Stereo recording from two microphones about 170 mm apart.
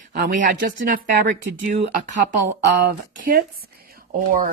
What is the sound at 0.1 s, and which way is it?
Speech, 50° right (ahead or behind).